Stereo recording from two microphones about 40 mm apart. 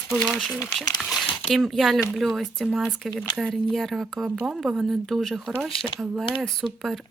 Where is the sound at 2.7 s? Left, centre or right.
Centre.